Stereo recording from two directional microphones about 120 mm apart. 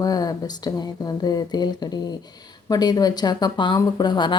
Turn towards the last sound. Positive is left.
turn(degrees=40)  # may be behind; listen again after turning